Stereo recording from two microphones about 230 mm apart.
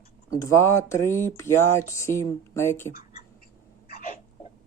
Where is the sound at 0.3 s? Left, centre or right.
Centre.